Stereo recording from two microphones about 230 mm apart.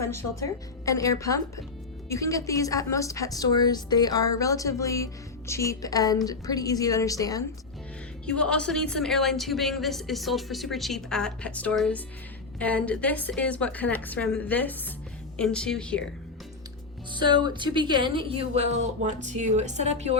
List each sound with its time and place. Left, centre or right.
0.1 s a woman's voice: left
0.9 s a woman's voice: centre
8.3 s a woman's voice: centre
17.1 s speech: centre